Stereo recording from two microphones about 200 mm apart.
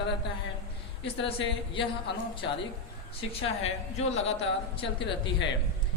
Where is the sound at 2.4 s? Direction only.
70° left (ahead or behind).